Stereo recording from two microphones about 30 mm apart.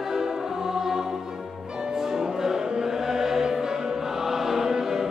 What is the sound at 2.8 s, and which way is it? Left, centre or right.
Choir, centre.